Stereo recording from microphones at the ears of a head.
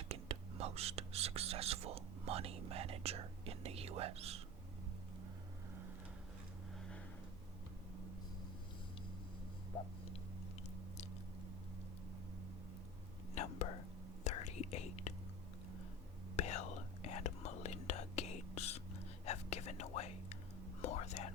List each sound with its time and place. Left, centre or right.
0.1 s whispering: right
13.3 s whispering: left
16.3 s whispering: left